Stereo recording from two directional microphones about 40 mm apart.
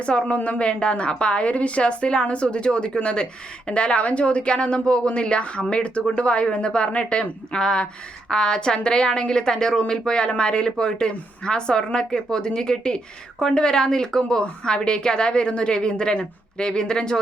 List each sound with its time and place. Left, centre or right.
0.0 s a woman's voice: left